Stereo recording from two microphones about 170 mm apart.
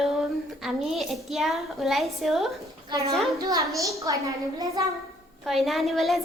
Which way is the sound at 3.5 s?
20° right (ahead or behind).